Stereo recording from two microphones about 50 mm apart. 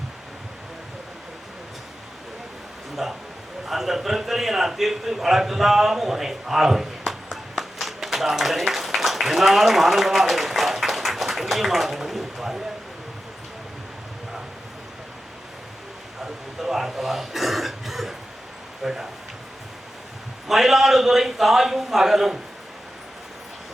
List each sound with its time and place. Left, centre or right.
2.9 s a man's voice: centre
16.2 s cough: centre
18.8 s speech: centre
20.5 s a man's voice: centre